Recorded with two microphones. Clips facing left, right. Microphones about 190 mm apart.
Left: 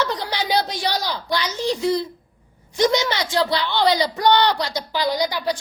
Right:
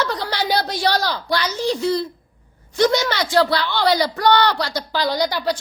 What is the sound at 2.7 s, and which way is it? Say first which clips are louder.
A woman's voice: right 1 dB; 20° left (ahead or behind).